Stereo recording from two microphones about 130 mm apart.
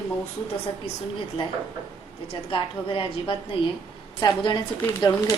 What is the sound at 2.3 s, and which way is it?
A woman's voice, 40° left (ahead or behind).